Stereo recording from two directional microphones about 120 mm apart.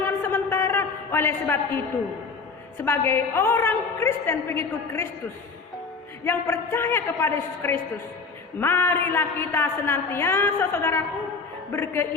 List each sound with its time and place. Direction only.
0.0 s a sound: 20° left (ahead or behind)
2.8 s a woman's voice: 20° left (ahead or behind)
6.2 s a woman's voice: 20° left (ahead or behind)